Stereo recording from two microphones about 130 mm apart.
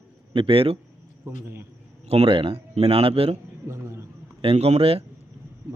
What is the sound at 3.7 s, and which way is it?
Speech, 20° right (ahead or behind).